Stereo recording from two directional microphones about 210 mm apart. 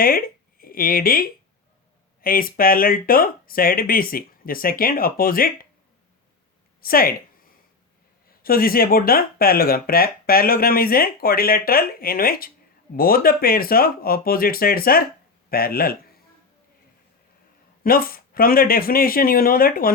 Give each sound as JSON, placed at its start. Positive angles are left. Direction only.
{"t": 0.0, "sound": "speech", "side_deg": 45}
{"t": 6.8, "sound": "speech", "side_deg": 45}
{"t": 8.4, "sound": "speech", "side_deg": 45}
{"t": 17.8, "sound": "speech", "side_deg": 45}